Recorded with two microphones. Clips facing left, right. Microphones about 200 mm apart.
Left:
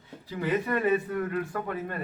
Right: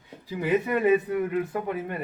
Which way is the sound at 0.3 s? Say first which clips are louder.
Right 3 dB; 15° right (ahead or behind).